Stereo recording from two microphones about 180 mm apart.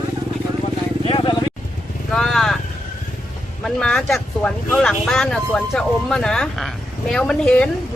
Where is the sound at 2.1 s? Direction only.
5° left (ahead or behind).